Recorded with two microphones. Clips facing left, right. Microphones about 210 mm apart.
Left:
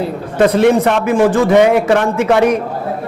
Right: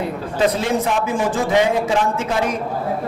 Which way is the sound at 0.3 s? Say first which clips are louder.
Left 9 dB; 60° left (ahead or behind).